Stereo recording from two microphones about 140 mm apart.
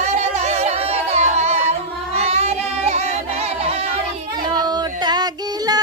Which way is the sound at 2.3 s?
50° right (ahead or behind).